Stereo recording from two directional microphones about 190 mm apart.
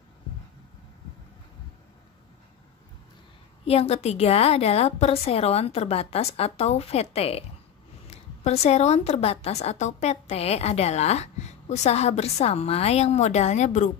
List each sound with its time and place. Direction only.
3.6 s a woman's voice: 30° left (ahead or behind)